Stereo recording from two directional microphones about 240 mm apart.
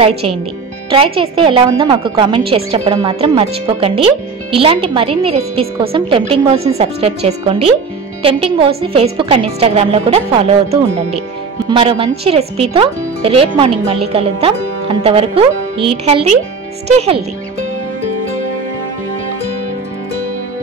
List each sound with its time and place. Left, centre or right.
0.8 s a woman's voice: right